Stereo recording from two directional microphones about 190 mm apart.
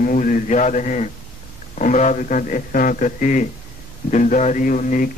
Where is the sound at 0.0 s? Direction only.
45° left (ahead or behind).